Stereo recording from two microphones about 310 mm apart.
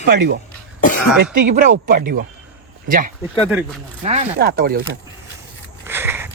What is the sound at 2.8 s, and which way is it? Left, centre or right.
Speech, right.